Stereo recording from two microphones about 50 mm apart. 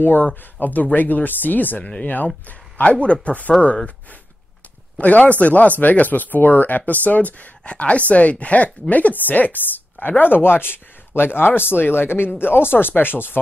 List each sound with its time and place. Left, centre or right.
0.0 s speech: left